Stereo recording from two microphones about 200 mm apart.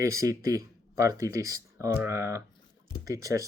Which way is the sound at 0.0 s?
15° right (ahead or behind).